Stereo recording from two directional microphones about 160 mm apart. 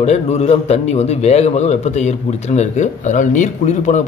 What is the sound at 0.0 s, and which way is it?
A man's voice, 45° left (ahead or behind).